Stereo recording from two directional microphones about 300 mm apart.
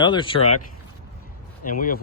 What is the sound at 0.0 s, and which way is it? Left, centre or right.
Speech, centre.